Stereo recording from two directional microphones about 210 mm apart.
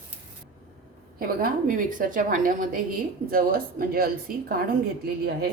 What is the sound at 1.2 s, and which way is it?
A woman's voice, 45° right (ahead or behind).